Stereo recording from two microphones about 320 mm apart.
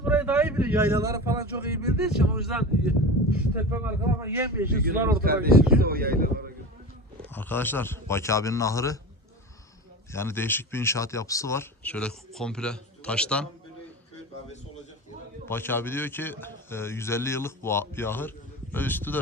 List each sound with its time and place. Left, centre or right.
0.0 s speech: centre
5.1 s speech: right
7.3 s a man's voice: centre
10.1 s a man's voice: centre
15.4 s a man's voice: centre